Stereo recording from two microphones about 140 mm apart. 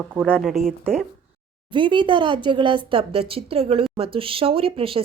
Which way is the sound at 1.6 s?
35° right (ahead or behind).